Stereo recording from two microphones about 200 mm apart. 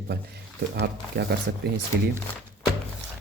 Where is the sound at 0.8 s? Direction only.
55° right (ahead or behind).